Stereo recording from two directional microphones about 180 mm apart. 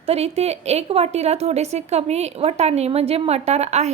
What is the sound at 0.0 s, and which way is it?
A woman's voice, 35° right (ahead or behind).